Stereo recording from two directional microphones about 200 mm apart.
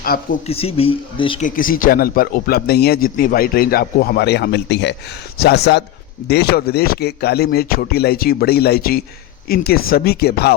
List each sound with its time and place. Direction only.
0.1 s speech: 50° left (ahead or behind)
0.4 s speech: 30° left (ahead or behind)
1.4 s speech: 45° left (ahead or behind)